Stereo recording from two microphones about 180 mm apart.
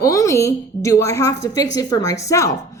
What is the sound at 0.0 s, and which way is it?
A woman's voice, 15° left (ahead or behind).